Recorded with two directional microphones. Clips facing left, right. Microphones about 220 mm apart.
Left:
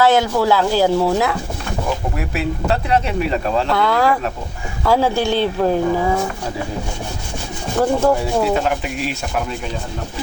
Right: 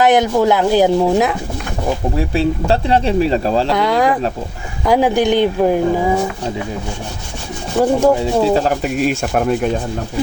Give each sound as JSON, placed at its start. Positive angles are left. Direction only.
{"t": 0.0, "sound": "speech", "side_deg": -20}
{"t": 2.1, "sound": "speech", "side_deg": -30}
{"t": 3.7, "sound": "speech", "side_deg": -20}
{"t": 7.8, "sound": "speech", "side_deg": -15}
{"t": 8.4, "sound": "speech", "side_deg": -30}